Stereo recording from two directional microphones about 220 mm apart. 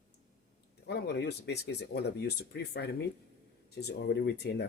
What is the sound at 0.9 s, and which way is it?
Speech, 50° left (ahead or behind).